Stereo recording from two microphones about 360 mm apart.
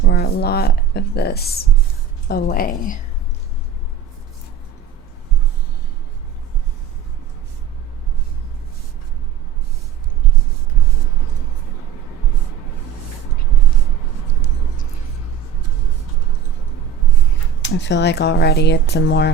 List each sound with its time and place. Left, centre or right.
0.1 s speech: left
17.6 s speech: left